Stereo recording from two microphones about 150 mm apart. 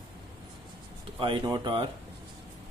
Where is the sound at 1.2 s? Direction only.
35° right (ahead or behind).